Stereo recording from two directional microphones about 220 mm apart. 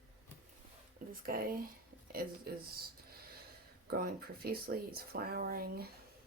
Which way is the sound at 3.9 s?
45° right (ahead or behind).